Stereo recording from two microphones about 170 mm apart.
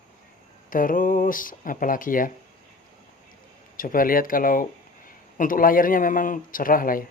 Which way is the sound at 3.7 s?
55° left (ahead or behind).